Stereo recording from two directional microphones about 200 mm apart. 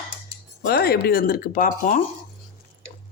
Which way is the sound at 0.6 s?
50° left (ahead or behind).